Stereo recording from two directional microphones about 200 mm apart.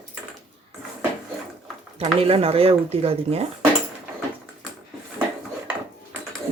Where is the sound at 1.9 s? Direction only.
30° right (ahead or behind).